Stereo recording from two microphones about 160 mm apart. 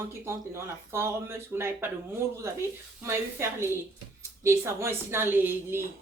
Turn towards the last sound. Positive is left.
turn(degrees=-15)  # may be behind; listen again after turning